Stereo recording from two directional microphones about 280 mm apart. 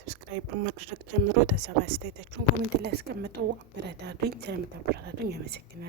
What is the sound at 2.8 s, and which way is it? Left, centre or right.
A woman's voice, right.